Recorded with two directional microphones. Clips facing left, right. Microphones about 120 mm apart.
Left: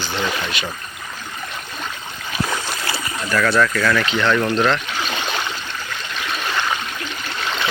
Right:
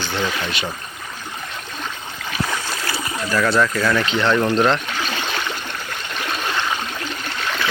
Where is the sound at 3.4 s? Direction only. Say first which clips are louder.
Left 1 dB; 20° right (ahead or behind).